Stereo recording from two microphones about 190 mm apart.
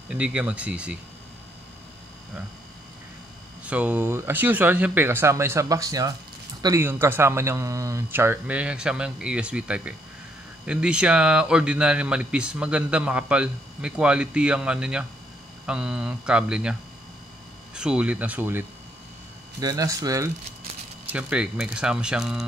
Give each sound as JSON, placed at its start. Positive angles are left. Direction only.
{"t": 0.1, "sound": "speech", "side_deg": -5}
{"t": 3.6, "sound": "speech", "side_deg": -5}
{"t": 17.7, "sound": "speech", "side_deg": -5}
{"t": 21.1, "sound": "speech", "side_deg": -5}